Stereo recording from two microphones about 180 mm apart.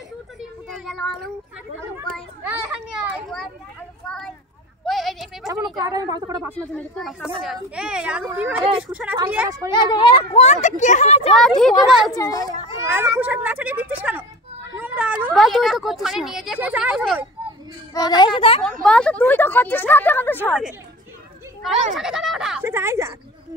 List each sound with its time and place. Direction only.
0.4 s a sound: centre (ahead or behind)
2.4 s children playing: 5° right (ahead or behind)
4.8 s a sound: centre (ahead or behind)
5.5 s a woman's voice: 20° right (ahead or behind)
6.5 s speech: 5° left (ahead or behind)
9.7 s speech: 25° left (ahead or behind)
11.3 s speech: 5° left (ahead or behind)
12.1 s a child's voice: 20° left (ahead or behind)
12.9 s speech: 10° right (ahead or behind)
17.9 s a child's voice: 25° left (ahead or behind)
18.6 s speech: 5° left (ahead or behind)
21.9 s speech: centre (ahead or behind)
22.6 s speech: 15° right (ahead or behind)